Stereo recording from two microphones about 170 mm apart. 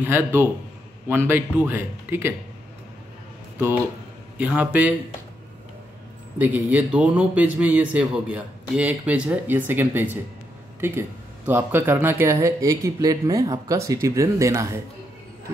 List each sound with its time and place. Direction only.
0.0 s speech: 15° right (ahead or behind)
4.4 s speech: 10° right (ahead or behind)
6.3 s speech: 10° right (ahead or behind)